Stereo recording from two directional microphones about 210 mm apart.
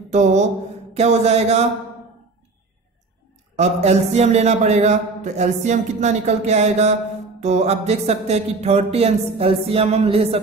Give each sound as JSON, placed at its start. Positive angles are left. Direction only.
{"t": 0.1, "sound": "a man's voice", "side_deg": -35}
{"t": 3.5, "sound": "a man's voice", "side_deg": -30}